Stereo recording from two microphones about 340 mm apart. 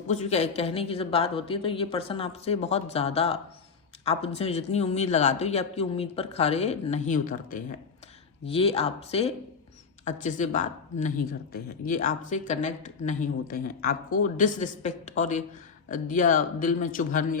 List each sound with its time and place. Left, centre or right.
0.1 s a woman's voice: centre